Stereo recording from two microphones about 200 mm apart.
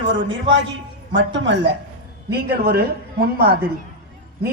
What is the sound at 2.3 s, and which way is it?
Speech, 50° right (ahead or behind).